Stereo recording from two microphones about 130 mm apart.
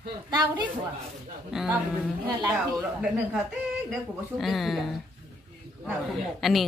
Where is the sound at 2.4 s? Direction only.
25° right (ahead or behind).